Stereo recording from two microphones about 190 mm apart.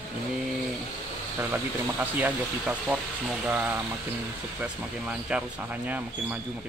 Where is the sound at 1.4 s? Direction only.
10° right (ahead or behind).